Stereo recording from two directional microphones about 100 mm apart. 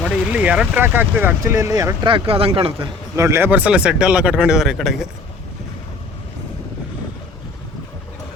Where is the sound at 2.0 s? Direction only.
65° right (ahead or behind).